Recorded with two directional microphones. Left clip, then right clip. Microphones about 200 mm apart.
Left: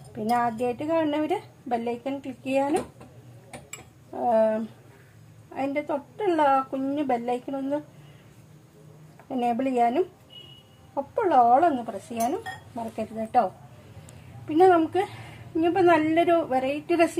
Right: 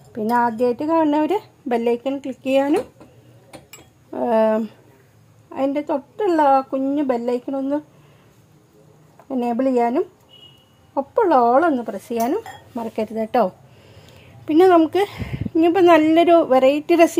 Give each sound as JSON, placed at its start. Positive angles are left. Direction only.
{"t": 0.1, "sound": "a woman's voice", "side_deg": -40}
{"t": 4.2, "sound": "speech", "side_deg": -60}
{"t": 5.5, "sound": "speech", "side_deg": -45}
{"t": 9.3, "sound": "speech", "side_deg": -35}
{"t": 11.0, "sound": "a woman's voice", "side_deg": -45}
{"t": 14.5, "sound": "a woman's voice", "side_deg": -50}